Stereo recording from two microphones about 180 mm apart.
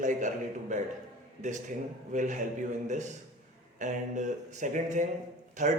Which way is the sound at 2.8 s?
40° right (ahead or behind).